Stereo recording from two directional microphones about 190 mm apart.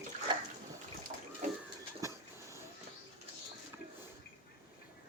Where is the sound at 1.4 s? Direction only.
40° right (ahead or behind).